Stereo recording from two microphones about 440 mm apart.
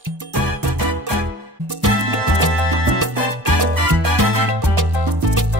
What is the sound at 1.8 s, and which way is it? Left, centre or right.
Music, right.